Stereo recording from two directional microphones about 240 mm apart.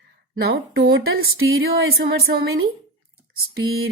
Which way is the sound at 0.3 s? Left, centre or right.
Right.